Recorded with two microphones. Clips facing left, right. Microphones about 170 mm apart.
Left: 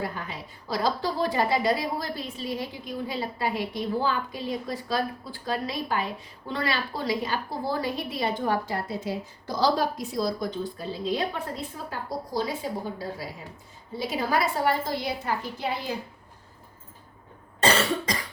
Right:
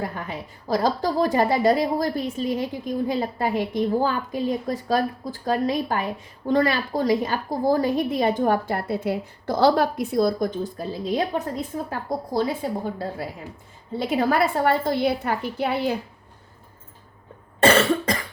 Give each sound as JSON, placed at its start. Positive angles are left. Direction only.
{"t": 0.0, "sound": "a woman's voice", "side_deg": -45}
{"t": 14.0, "sound": "a woman's voice", "side_deg": -50}
{"t": 17.6, "sound": "cough", "side_deg": -55}